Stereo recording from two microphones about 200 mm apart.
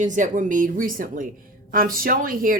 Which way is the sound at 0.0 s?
40° right (ahead or behind).